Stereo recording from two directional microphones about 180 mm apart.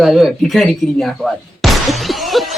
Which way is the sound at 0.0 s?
Centre (ahead or behind).